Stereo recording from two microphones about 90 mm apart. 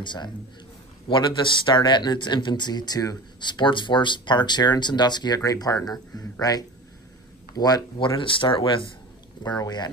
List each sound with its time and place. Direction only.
0.0 s speech: 55° left (ahead or behind)
8.0 s speech: 75° left (ahead or behind)
9.4 s speech: 50° left (ahead or behind)